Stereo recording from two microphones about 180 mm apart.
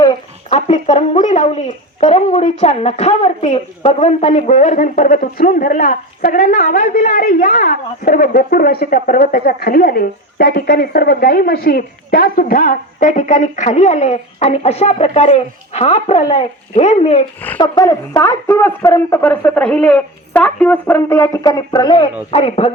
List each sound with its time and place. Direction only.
0.5 s speech: 40° left (ahead or behind)
6.8 s a woman's voice: 40° left (ahead or behind)
17.6 s a woman's voice: 20° left (ahead or behind)